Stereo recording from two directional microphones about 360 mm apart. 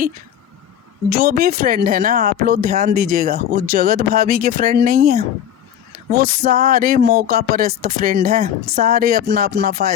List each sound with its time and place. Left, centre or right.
1.2 s speech: right